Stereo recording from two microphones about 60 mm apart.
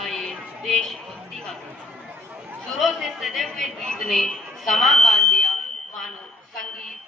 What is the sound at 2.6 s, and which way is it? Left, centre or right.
A woman's voice, centre.